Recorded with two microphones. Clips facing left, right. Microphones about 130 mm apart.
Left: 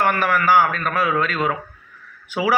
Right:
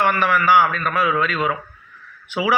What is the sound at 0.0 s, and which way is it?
Speech, 45° left (ahead or behind).